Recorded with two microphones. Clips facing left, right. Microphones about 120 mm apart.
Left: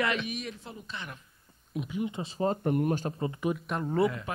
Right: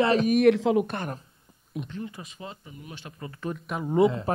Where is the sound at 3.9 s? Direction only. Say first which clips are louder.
Right 6 dB; 20° right (ahead or behind).